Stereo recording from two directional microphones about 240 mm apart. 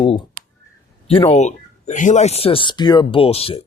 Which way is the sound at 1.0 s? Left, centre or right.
Left.